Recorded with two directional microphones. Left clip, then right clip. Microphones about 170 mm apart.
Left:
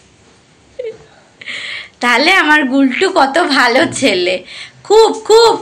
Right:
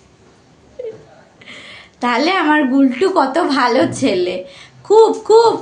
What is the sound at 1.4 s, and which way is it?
A woman's voice, centre (ahead or behind).